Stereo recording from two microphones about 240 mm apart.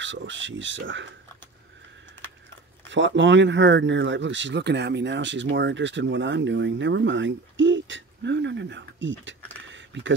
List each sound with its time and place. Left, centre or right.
0.0 s speech: right
2.9 s speech: right